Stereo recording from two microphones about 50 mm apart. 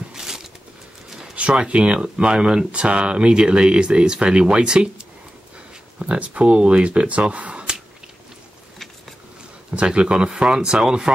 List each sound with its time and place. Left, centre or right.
0.1 s a sound: centre
1.3 s speech: right
9.8 s speech: right